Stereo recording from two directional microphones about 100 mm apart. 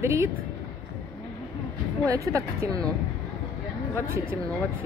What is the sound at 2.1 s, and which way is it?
Speech, 30° right (ahead or behind).